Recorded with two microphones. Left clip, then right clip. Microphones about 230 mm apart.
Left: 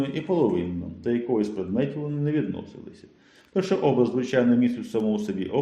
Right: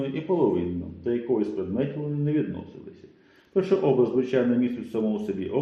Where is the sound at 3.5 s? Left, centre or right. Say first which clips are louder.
Right 1 dB; left.